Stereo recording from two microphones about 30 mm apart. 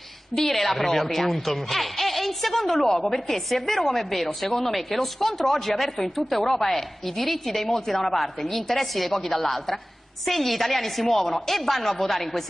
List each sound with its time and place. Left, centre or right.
0.4 s a woman's voice: centre
8.2 s a woman's voice: centre